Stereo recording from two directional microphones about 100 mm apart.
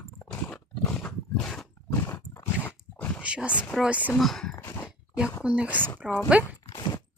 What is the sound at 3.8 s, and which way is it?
Speech, 15° right (ahead or behind).